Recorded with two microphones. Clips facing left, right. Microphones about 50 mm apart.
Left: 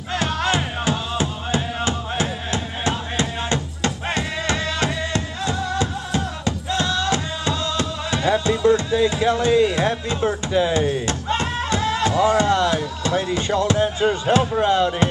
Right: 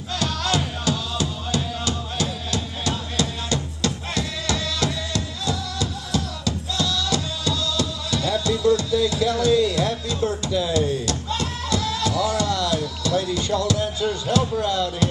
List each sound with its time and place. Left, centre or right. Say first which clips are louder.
0.1 s music: left 3 dB; left